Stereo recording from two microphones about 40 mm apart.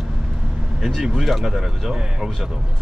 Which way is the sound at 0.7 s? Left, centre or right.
Centre.